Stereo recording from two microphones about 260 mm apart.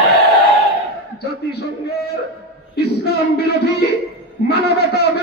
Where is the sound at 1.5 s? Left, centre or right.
Left.